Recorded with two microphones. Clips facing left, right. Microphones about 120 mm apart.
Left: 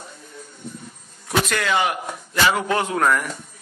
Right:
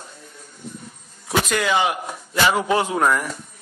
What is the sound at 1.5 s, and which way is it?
A man's voice, 15° right (ahead or behind).